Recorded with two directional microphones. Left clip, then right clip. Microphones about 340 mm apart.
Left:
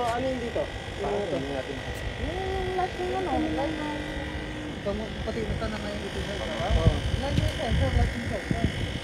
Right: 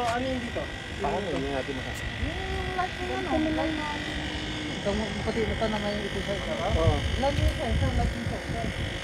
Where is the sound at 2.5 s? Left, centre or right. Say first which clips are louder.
Left 2 dB; left.